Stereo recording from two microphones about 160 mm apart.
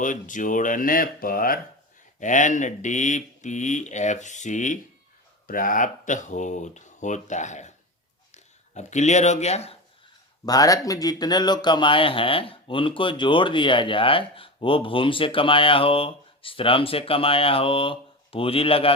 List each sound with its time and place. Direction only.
0.0 s speech: 55° left (ahead or behind)
2.1 s speech: 50° left (ahead or behind)
10.4 s speech: 25° left (ahead or behind)